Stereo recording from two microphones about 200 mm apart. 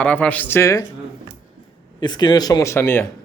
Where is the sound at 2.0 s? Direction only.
20° left (ahead or behind).